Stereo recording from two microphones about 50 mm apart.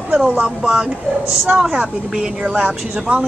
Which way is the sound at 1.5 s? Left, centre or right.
Centre.